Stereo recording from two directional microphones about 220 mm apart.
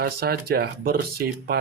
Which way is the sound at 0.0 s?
45° right (ahead or behind).